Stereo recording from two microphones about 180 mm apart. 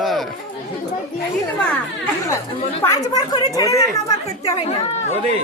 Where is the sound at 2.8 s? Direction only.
20° left (ahead or behind).